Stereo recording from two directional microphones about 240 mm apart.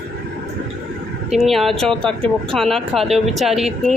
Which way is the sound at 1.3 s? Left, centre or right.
Centre.